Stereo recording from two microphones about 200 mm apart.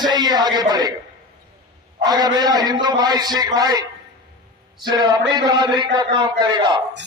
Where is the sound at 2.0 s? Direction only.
20° right (ahead or behind).